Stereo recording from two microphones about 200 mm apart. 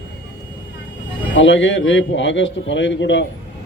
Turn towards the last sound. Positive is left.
turn(degrees=65)  # may be behind; listen again after turning